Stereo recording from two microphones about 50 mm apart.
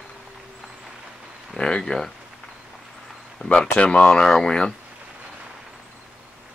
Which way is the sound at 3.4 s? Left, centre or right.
Centre.